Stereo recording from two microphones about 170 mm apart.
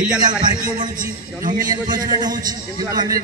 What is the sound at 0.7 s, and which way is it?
Speech, 50° right (ahead or behind).